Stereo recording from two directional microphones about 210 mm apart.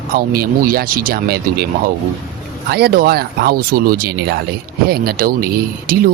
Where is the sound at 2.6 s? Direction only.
50° right (ahead or behind).